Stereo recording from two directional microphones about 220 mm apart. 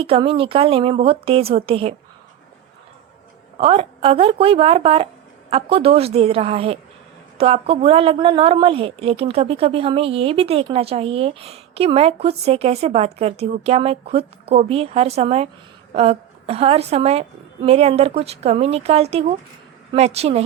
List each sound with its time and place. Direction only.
0.0 s a woman's voice: 25° right (ahead or behind)
3.6 s a woman's voice: 25° right (ahead or behind)